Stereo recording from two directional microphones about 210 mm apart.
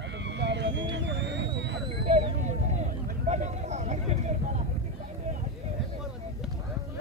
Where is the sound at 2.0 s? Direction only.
30° right (ahead or behind).